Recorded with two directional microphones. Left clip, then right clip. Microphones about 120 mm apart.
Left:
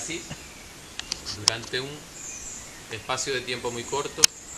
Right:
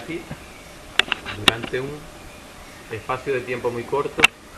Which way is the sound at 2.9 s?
40° left (ahead or behind).